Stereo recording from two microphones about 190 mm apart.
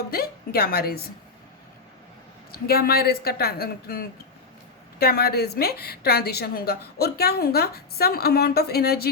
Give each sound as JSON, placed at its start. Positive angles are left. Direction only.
{"t": 0.1, "sound": "a woman's voice", "side_deg": 55}
{"t": 2.5, "sound": "a woman's voice", "side_deg": 55}